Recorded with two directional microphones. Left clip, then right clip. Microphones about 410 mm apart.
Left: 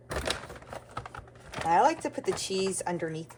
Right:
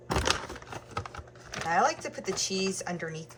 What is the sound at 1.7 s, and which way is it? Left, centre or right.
Speech, centre.